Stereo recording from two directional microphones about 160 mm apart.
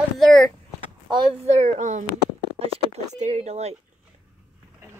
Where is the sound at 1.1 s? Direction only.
40° right (ahead or behind).